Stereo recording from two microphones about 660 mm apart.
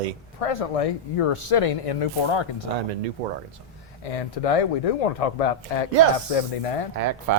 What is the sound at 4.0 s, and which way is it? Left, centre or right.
Speech, left.